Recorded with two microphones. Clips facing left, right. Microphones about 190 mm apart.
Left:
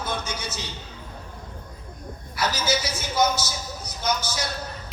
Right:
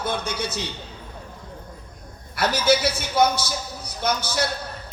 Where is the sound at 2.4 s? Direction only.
60° right (ahead or behind).